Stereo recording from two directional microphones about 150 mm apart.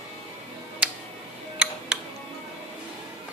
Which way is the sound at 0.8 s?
10° right (ahead or behind).